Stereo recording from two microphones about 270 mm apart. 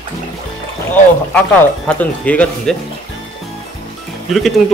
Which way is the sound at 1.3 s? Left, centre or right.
Centre.